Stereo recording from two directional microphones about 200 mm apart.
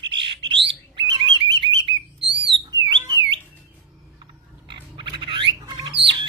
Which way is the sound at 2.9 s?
20° right (ahead or behind).